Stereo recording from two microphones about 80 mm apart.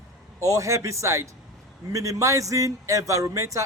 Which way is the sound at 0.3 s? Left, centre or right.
Right.